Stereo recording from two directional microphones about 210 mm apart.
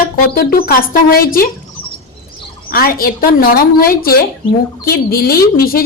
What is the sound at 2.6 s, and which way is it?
Speech, 45° left (ahead or behind).